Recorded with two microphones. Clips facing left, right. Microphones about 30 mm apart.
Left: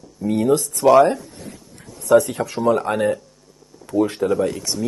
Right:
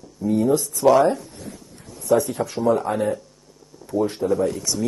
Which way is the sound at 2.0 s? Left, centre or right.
Left.